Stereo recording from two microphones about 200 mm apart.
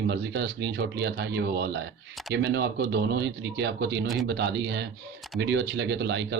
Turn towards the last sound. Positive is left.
turn(degrees=-60)  # may be behind; listen again after turning